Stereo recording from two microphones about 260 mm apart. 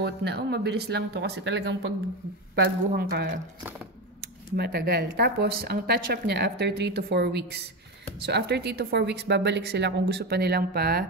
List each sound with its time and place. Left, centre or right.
0.0 s speech: right